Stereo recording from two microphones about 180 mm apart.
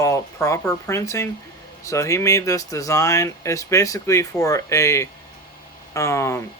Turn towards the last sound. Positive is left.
turn(degrees=15)  # may be behind; listen again after turning